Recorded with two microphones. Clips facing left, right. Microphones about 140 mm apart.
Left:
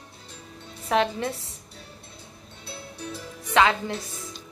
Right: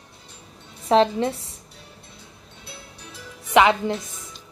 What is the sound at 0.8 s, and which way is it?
Speech, 30° right (ahead or behind).